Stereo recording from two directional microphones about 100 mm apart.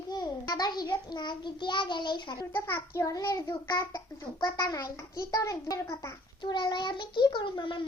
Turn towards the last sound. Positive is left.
turn(degrees=55)  # may be behind; listen again after turning